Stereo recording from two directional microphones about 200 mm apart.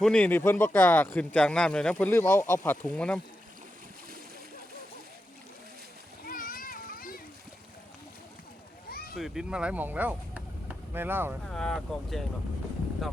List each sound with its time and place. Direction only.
0.0 s speech: 5° left (ahead or behind)
6.2 s splash: 45° left (ahead or behind)
8.9 s boat: 50° left (ahead or behind)
9.1 s speech: centre (ahead or behind)
11.4 s speech: 5° left (ahead or behind)